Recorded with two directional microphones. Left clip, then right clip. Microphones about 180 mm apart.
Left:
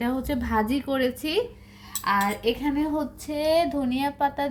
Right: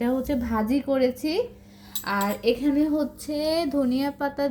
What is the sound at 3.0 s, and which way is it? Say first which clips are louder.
Female singing: right 1 dB; 15° left (ahead or behind).